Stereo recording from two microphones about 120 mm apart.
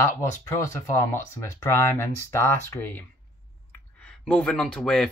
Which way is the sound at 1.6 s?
25° left (ahead or behind).